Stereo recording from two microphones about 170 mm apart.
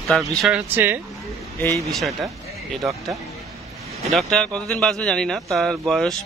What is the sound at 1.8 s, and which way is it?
Speech, centre (ahead or behind).